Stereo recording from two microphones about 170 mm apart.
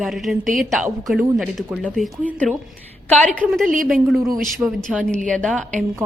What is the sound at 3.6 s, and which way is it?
Speech, 55° right (ahead or behind).